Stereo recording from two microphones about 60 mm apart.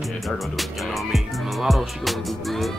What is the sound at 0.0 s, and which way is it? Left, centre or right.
Music, centre.